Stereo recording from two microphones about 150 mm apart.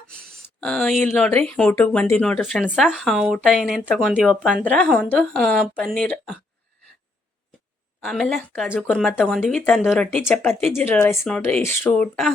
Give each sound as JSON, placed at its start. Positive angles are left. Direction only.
{"t": 0.1, "sound": "a sound", "side_deg": 5}
{"t": 1.2, "sound": "speech", "side_deg": 10}
{"t": 4.6, "sound": "speech", "side_deg": 10}
{"t": 8.0, "sound": "speech", "side_deg": 0}
{"t": 10.2, "sound": "speech", "side_deg": 10}
{"t": 11.3, "sound": "speech", "side_deg": 5}